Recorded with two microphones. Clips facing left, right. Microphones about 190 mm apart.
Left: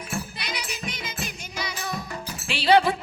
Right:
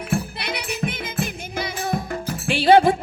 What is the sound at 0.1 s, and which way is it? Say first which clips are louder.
Music: right 7 dB; 60° right (ahead or behind).